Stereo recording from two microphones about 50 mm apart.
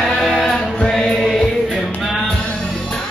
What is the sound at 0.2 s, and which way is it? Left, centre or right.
Music, centre.